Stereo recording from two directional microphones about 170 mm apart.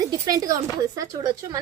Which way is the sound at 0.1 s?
20° right (ahead or behind).